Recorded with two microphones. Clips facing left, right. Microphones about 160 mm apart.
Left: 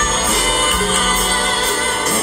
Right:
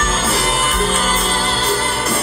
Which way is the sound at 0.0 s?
35° right (ahead or behind).